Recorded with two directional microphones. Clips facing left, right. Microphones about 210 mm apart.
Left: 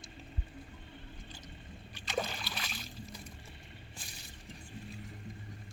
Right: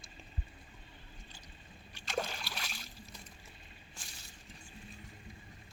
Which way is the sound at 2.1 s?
Centre (ahead or behind).